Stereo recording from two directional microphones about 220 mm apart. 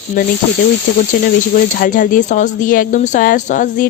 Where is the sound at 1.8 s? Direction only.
35° left (ahead or behind).